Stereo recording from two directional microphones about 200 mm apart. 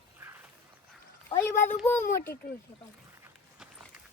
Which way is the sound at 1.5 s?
40° left (ahead or behind).